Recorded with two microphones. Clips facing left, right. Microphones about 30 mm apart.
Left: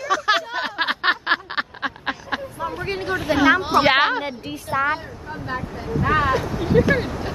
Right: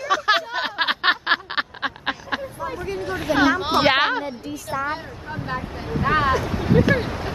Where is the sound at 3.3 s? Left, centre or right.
Left.